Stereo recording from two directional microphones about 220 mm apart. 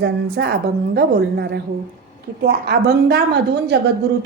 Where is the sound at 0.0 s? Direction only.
50° right (ahead or behind).